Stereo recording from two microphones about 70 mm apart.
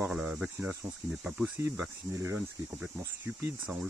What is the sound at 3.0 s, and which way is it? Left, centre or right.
Speech, right.